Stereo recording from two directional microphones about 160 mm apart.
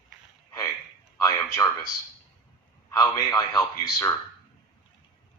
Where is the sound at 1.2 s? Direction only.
20° left (ahead or behind).